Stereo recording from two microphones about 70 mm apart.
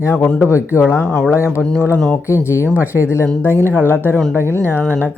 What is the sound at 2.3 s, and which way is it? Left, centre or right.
Speech, left.